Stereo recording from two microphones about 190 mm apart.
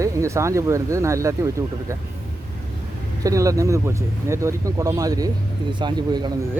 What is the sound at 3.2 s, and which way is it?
Speech, 15° right (ahead or behind).